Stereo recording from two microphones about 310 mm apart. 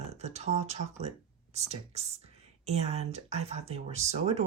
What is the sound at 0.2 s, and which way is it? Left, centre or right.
Speech, right.